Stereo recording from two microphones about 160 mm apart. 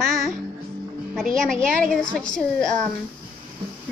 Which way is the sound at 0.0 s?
5° left (ahead or behind).